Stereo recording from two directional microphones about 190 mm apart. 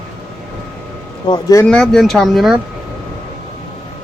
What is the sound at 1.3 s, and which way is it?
Speech, 20° left (ahead or behind).